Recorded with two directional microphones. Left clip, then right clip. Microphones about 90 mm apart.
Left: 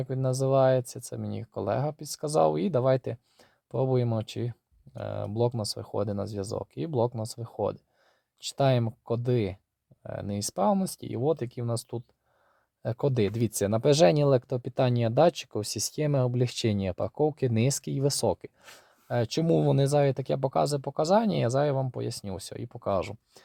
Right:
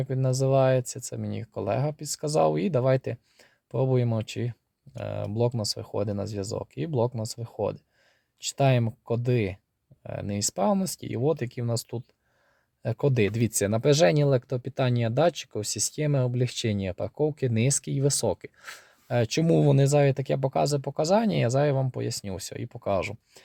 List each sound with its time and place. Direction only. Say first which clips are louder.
0.0 s speech: right 1 dB; 20° left (ahead or behind)
18.6 s speech: right 8 dB; centre (ahead or behind); by 23.4 s 15° left (ahead or behind)